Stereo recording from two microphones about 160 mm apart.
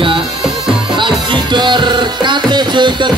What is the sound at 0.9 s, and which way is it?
Music, 30° right (ahead or behind).